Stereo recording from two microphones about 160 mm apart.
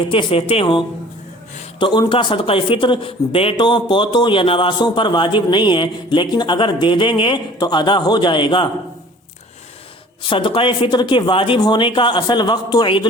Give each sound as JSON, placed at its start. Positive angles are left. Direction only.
{"t": 0.0, "sound": "speech", "side_deg": 30}
{"t": 10.2, "sound": "speech", "side_deg": 30}